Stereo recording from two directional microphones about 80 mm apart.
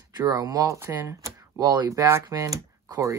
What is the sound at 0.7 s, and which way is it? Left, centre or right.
Speech, right.